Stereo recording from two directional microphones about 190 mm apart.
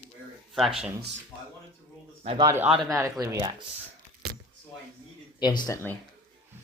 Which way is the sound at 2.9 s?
15° right (ahead or behind).